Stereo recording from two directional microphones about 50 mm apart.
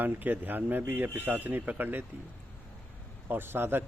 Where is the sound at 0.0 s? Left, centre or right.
Right.